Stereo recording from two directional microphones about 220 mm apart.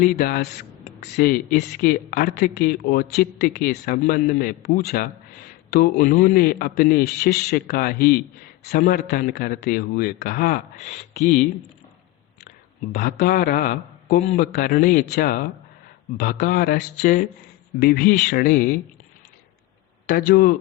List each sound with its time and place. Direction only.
0.0 s speech: 40° left (ahead or behind)
12.5 s a man's voice: 40° left (ahead or behind)
20.1 s speech: 40° left (ahead or behind)